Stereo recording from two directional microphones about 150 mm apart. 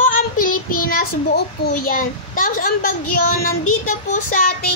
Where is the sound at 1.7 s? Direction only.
65° left (ahead or behind).